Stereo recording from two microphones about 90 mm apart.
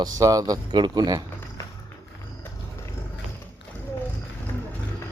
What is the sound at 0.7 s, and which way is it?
Speech, 55° right (ahead or behind).